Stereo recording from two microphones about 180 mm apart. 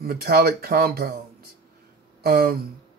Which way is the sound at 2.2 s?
55° right (ahead or behind).